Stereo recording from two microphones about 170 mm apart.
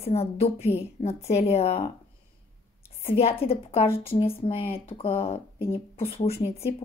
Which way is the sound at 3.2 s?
35° left (ahead or behind).